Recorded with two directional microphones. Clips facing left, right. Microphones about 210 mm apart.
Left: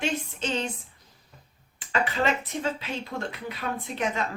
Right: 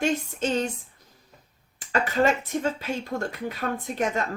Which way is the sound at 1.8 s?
40° right (ahead or behind).